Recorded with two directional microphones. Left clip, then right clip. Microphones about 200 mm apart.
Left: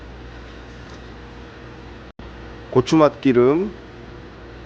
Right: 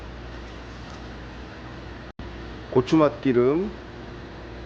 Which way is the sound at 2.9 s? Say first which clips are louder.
Left 5 dB; 30° left (ahead or behind).